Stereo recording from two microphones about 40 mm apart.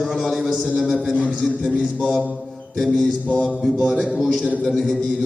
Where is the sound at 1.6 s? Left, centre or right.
Left.